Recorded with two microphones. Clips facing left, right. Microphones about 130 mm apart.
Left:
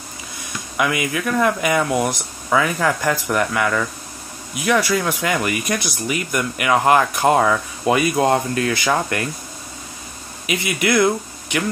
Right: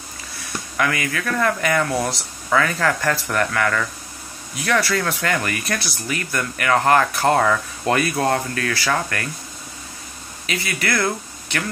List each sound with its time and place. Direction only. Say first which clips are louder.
0.7 s speech: left 2 dB; 15° left (ahead or behind)
10.4 s speech: left 4 dB; 15° left (ahead or behind)